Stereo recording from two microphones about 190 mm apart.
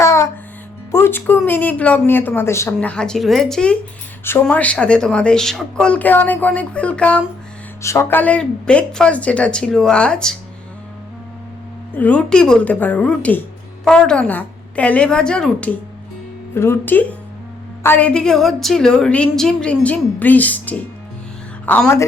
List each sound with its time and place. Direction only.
0.0 s music: 15° left (ahead or behind)
1.5 s a woman's voice: 10° left (ahead or behind)
11.9 s a woman's voice: 5° left (ahead or behind)